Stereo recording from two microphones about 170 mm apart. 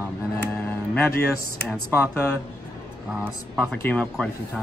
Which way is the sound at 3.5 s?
5° left (ahead or behind).